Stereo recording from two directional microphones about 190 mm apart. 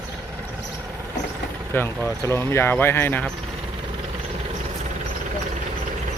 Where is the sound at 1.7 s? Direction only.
10° left (ahead or behind).